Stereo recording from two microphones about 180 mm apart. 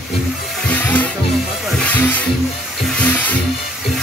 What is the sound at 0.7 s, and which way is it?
Music, 10° left (ahead or behind).